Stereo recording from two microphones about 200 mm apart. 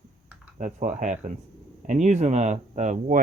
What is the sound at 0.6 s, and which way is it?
Speech, 40° right (ahead or behind).